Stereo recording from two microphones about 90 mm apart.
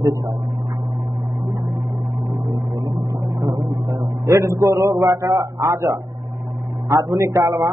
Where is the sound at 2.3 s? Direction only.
45° right (ahead or behind).